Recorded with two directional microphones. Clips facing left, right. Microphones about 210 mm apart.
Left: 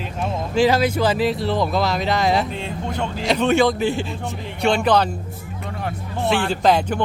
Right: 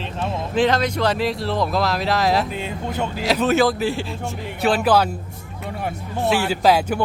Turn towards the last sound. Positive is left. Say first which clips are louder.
# even
turn(degrees=-5)  # may be behind; listen again after turning